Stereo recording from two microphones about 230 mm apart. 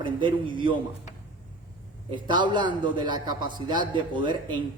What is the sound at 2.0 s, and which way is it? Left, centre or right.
A man's voice, centre.